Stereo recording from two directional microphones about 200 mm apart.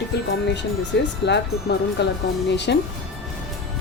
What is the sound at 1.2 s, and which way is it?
Speech, 60° left (ahead or behind).